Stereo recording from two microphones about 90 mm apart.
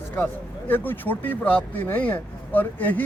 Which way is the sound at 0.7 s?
20° left (ahead or behind).